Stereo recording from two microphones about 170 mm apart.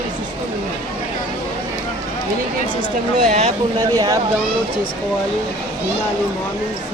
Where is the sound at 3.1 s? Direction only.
45° right (ahead or behind).